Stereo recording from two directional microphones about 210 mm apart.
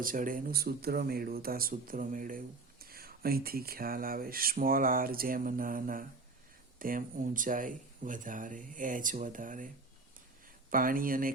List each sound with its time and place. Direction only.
0.0 s speech: 40° right (ahead or behind)
10.7 s speech: 40° right (ahead or behind)